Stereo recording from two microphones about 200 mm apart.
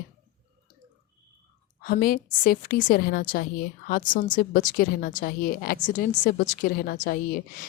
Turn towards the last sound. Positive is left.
turn(degrees=45)  # may be behind; listen again after turning